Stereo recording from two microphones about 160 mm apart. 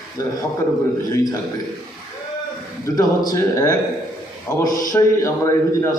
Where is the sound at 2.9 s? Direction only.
20° left (ahead or behind).